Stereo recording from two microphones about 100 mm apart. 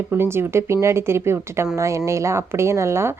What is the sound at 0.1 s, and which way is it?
A woman's voice, 25° right (ahead or behind).